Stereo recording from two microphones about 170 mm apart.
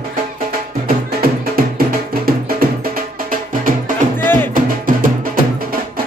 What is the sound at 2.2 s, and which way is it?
Music, 60° right (ahead or behind).